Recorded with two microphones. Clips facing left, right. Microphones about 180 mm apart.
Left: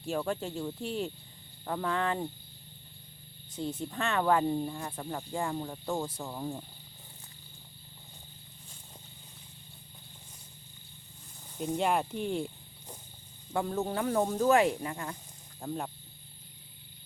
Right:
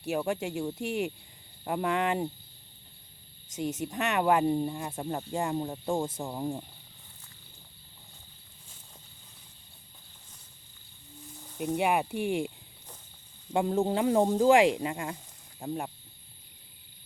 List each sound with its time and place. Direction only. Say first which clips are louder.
0.0 s speech: right 2 dB; 10° right (ahead or behind)
3.6 s speech: right 3 dB; 20° right (ahead or behind)
11.4 s speech: right 2 dB; 5° right (ahead or behind)
13.5 s speech: right 5 dB; 20° right (ahead or behind)